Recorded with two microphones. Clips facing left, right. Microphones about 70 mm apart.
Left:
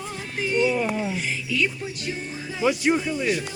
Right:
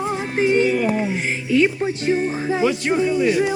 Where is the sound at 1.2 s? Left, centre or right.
Right.